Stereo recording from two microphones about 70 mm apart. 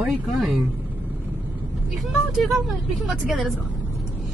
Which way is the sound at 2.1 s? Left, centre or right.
Centre.